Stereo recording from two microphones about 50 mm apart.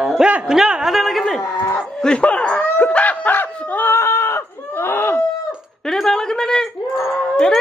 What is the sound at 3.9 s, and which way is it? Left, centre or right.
Screaming, left.